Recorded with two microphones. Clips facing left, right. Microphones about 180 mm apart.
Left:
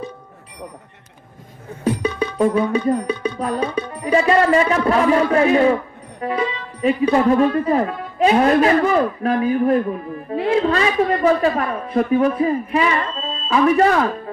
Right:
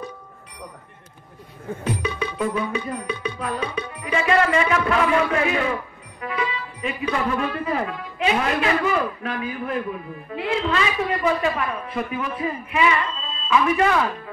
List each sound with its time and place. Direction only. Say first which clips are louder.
2.0 s music: left 6 dB; 35° left (ahead or behind)